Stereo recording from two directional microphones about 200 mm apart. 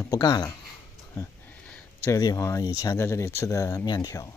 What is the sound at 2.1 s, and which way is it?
Speech, 15° left (ahead or behind).